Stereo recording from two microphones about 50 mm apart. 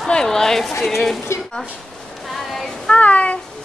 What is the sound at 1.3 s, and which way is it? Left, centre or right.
Speech, left.